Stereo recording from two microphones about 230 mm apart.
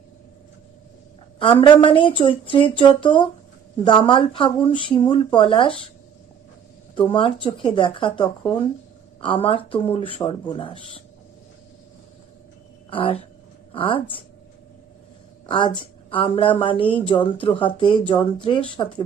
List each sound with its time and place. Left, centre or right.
1.4 s speech: left
6.9 s speech: left
12.9 s speech: left
15.4 s speech: left